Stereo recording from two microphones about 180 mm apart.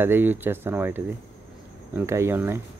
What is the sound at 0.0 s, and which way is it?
Speech, 10° right (ahead or behind).